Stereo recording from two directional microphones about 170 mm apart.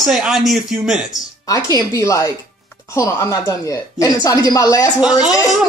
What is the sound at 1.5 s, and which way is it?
A woman's voice, 20° left (ahead or behind).